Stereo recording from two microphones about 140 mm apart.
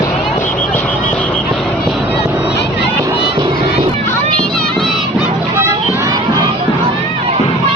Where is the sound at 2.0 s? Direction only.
15° right (ahead or behind).